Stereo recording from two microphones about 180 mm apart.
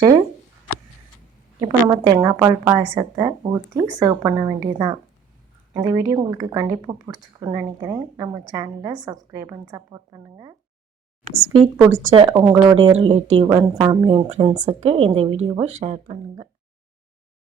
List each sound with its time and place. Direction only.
1.6 s speech: 20° right (ahead or behind)
11.5 s speech: 20° right (ahead or behind); by 16.0 s 35° right (ahead or behind)